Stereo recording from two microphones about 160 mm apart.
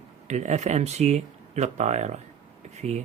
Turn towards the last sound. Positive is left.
turn(degrees=-45)  # may be behind; listen again after turning